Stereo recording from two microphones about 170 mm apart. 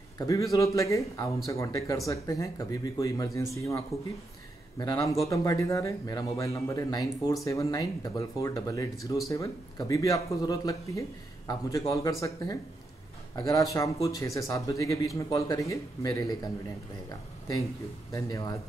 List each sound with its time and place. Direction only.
0.3 s speech: 20° left (ahead or behind)
18.1 s speech: 20° left (ahead or behind)